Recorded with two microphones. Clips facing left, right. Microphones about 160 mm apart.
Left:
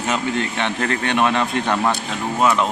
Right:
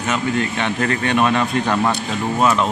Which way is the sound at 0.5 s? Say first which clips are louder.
Right 2 dB; 10° right (ahead or behind).